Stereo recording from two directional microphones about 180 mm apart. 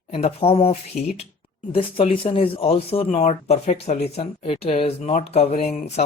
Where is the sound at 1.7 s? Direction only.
30° left (ahead or behind).